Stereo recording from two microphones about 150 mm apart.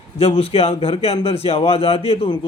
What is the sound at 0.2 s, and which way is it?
A man's voice, 40° left (ahead or behind).